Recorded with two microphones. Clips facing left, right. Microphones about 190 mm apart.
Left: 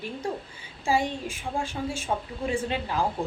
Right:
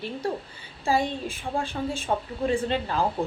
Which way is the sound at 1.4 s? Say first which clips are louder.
Right 2 dB; 60° right (ahead or behind).